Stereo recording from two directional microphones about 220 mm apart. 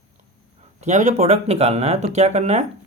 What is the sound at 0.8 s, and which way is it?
Speech, 30° right (ahead or behind).